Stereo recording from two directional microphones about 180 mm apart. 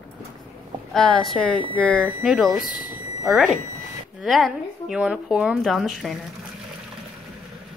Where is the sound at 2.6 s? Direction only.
50° left (ahead or behind).